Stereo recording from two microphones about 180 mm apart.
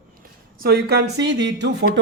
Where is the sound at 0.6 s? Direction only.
60° right (ahead or behind).